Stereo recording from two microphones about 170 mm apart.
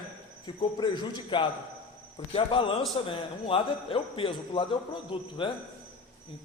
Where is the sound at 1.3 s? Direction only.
30° left (ahead or behind).